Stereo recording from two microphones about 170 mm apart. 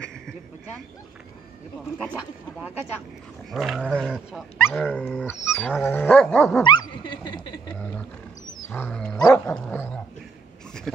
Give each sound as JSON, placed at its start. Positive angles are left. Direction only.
{"t": 2.0, "sound": "speech", "side_deg": -5}
{"t": 4.6, "sound": "dog", "side_deg": 10}
{"t": 6.6, "sound": "dog", "side_deg": 25}
{"t": 8.6, "sound": "dog", "side_deg": 10}